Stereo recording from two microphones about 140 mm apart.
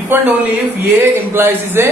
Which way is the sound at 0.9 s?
15° right (ahead or behind).